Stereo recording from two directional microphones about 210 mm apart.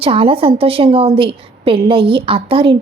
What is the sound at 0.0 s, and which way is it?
Speech, 25° right (ahead or behind).